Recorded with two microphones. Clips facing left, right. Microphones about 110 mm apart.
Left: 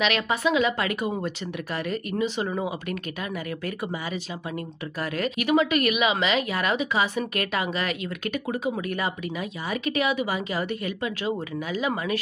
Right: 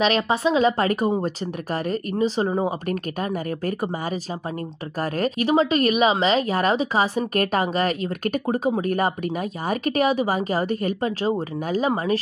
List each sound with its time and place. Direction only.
0.0 s speech: 35° right (ahead or behind)